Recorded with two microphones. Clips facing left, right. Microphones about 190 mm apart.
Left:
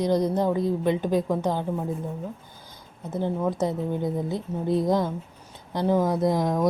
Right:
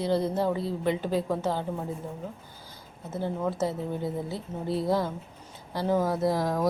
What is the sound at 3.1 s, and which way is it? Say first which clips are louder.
A woman's voice: left 4 dB; 15° left (ahead or behind).